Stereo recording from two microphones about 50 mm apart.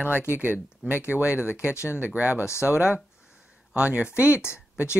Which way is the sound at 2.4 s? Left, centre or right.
Left.